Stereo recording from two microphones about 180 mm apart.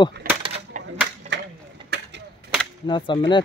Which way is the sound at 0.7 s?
45° right (ahead or behind).